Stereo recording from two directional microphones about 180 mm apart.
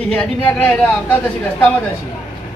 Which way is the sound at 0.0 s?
5° left (ahead or behind).